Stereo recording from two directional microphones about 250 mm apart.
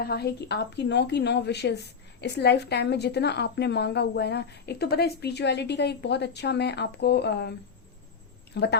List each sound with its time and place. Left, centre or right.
0.0 s a woman's voice: left
8.5 s a woman's voice: left